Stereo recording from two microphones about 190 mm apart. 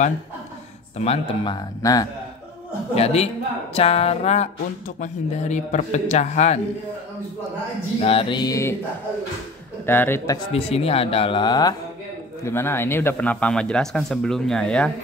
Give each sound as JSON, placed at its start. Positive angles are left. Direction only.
{"t": 0.9, "sound": "speech", "side_deg": 30}
{"t": 2.9, "sound": "a man's voice", "side_deg": 35}
{"t": 8.0, "sound": "speech", "side_deg": 30}
{"t": 9.8, "sound": "a man's voice", "side_deg": 10}
{"t": 10.5, "sound": "a man's voice", "side_deg": 30}